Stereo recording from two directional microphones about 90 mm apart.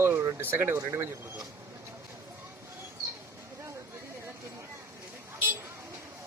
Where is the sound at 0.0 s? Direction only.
25° right (ahead or behind).